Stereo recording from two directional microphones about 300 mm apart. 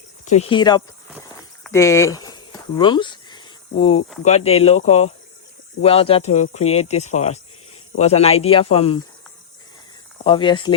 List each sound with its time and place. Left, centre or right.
0.3 s speech: left
1.6 s a sound: centre
4.2 s speech: left
10.2 s speech: centre